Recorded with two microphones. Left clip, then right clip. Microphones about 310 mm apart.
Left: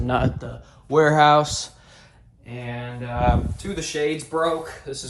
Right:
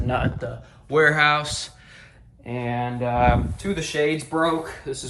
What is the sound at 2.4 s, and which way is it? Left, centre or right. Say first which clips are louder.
Speech: right 7 dB; centre.